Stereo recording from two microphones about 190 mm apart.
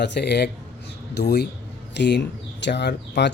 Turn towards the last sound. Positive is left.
turn(degrees=65)  # may be behind; listen again after turning